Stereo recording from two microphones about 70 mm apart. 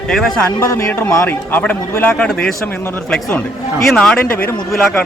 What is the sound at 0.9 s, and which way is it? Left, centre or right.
Speech, left.